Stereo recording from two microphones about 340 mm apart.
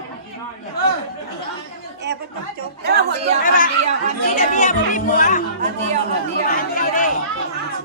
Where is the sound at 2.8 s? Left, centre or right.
Right.